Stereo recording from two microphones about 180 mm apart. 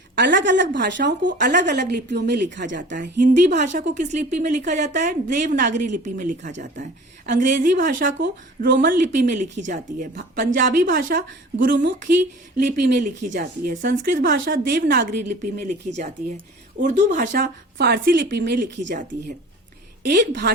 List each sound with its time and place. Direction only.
0.2 s a woman's voice: 80° right
3.7 s speech: 45° right (ahead or behind)
8.2 s speech: 65° right (ahead or behind)
11.7 s a woman's voice: 80° right
12.5 s speech: 45° right (ahead or behind); by 18.6 s 60° right (ahead or behind)
20.0 s a woman's voice: 65° right (ahead or behind)